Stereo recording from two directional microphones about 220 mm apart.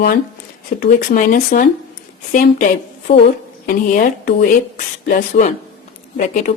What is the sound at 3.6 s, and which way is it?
A woman's voice, 40° left (ahead or behind).